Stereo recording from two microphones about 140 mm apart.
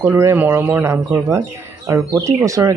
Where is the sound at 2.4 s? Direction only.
20° right (ahead or behind).